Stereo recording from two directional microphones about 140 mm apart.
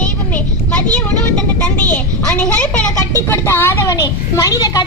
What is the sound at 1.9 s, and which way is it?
A woman's voice, 10° left (ahead or behind).